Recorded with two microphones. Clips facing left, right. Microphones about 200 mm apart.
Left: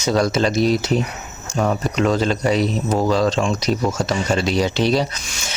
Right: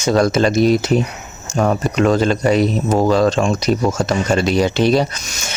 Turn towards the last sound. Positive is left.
turn(degrees=-45)  # may be behind; listen again after turning